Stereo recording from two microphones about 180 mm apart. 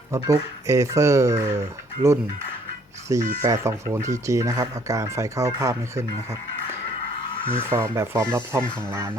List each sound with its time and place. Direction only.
0.1 s speech: 15° right (ahead or behind)
3.1 s speech: 20° right (ahead or behind)
7.7 s speech: 15° right (ahead or behind)